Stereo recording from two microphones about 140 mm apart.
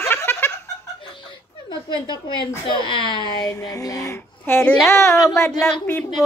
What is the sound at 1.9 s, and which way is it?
A woman's voice, 35° left (ahead or behind).